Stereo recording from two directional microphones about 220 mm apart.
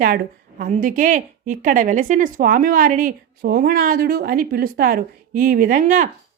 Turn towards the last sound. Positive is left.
turn(degrees=-35)  # may be behind; listen again after turning